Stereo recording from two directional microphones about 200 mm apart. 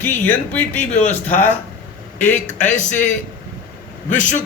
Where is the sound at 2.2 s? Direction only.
35° left (ahead or behind).